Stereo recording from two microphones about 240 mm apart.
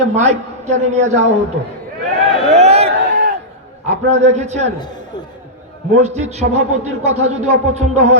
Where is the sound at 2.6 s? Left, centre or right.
Right.